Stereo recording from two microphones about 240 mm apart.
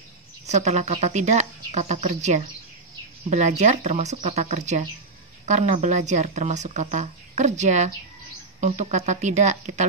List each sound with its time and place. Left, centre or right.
0.5 s speech: right